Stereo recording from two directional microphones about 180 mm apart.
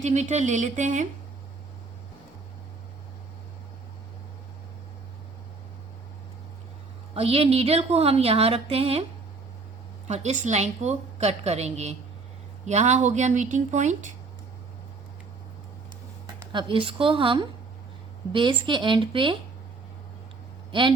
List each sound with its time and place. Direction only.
0.0 s speech: 40° right (ahead or behind)
7.1 s a woman's voice: 35° right (ahead or behind)
10.1 s a woman's voice: 40° right (ahead or behind)
16.2 s a woman's voice: 25° right (ahead or behind)